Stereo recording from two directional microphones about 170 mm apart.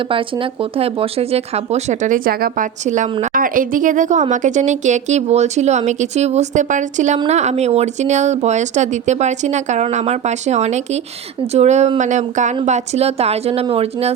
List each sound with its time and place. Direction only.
0.8 s speech: 35° right (ahead or behind)